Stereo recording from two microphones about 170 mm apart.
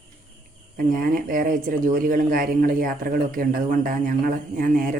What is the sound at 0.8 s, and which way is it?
Speech, 55° right (ahead or behind).